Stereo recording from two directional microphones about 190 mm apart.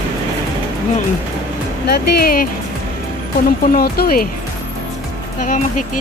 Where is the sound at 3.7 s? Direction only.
50° left (ahead or behind).